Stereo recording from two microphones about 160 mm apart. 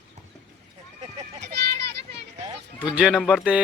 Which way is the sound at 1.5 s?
90° right.